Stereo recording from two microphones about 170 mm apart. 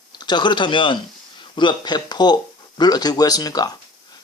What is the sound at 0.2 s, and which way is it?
Speech, 25° left (ahead or behind).